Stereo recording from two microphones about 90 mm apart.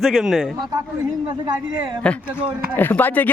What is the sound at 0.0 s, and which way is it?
Speech, centre (ahead or behind).